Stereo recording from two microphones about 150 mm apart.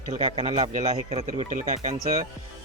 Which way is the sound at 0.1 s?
40° right (ahead or behind).